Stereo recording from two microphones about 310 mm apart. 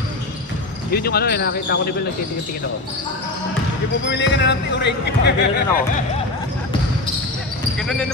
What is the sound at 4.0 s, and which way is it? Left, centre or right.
Speech, left.